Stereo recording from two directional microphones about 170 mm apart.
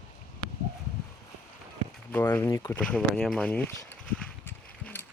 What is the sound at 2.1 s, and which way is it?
Speech, 10° left (ahead or behind).